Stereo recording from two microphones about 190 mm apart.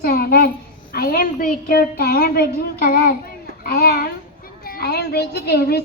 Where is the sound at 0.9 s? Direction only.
50° left (ahead or behind).